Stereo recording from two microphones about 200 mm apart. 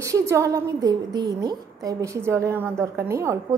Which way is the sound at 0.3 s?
15° right (ahead or behind).